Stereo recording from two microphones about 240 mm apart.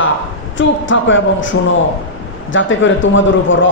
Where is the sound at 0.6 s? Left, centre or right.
Left.